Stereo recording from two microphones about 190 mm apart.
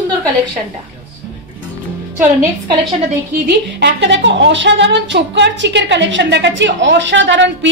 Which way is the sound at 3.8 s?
70° right (ahead or behind).